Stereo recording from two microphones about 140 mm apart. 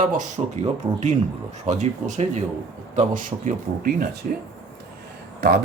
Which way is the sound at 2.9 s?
65° right (ahead or behind).